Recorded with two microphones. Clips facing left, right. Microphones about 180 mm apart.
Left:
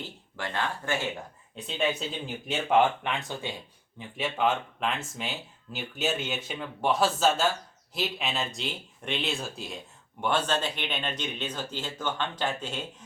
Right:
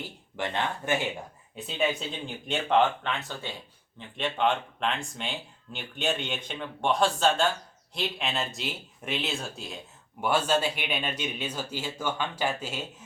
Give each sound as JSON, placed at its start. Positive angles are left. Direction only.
{"t": 0.3, "sound": "speech", "side_deg": -20}
{"t": 1.5, "sound": "speech", "side_deg": 0}
{"t": 4.2, "sound": "speech", "side_deg": 5}